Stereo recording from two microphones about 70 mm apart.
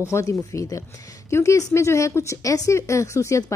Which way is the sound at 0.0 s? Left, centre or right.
Left.